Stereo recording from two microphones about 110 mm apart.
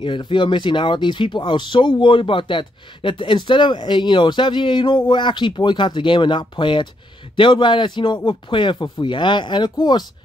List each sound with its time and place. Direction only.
0.0 s speech: 45° left (ahead or behind)